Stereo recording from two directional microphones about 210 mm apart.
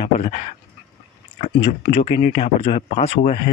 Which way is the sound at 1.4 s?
30° left (ahead or behind).